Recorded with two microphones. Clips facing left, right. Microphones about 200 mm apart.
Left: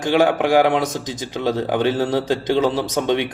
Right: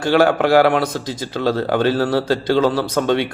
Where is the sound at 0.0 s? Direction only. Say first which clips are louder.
Right 2 dB; 15° left (ahead or behind).